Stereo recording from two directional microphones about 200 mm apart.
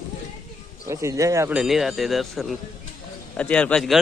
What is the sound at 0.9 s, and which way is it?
Speech, 15° right (ahead or behind).